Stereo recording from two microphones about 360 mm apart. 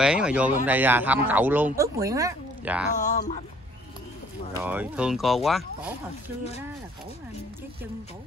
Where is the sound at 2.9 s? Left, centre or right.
Centre.